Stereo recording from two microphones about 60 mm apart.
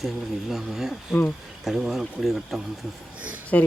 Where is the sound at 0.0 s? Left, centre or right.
Centre.